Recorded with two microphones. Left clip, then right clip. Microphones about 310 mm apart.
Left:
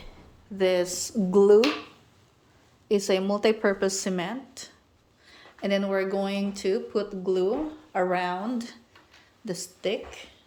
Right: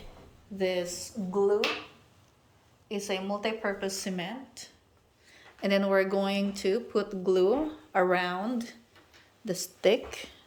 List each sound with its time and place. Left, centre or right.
0.6 s speech: centre; by 1.6 s left
2.9 s speech: left; by 9.6 s centre
9.8 s speech: centre